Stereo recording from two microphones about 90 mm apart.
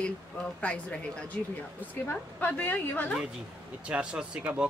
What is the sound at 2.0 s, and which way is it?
A woman's voice, 20° left (ahead or behind).